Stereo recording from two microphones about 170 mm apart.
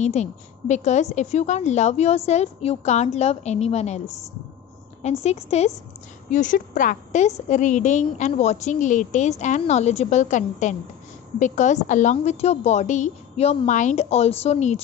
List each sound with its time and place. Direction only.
0.0 s a woman's voice: 40° left (ahead or behind)
5.2 s a woman's voice: 40° left (ahead or behind)